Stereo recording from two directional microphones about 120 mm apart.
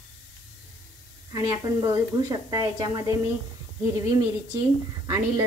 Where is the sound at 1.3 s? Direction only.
35° right (ahead or behind).